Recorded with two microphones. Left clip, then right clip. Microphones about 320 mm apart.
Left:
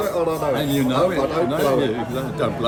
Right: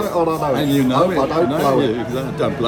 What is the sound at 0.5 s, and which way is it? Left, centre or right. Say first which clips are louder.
A man's voice: right 4 dB; centre.